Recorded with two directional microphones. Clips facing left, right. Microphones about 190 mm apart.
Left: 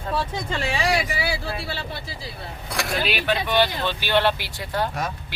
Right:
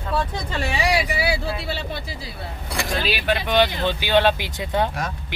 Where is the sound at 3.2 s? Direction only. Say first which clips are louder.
Right 3 dB; 15° right (ahead or behind).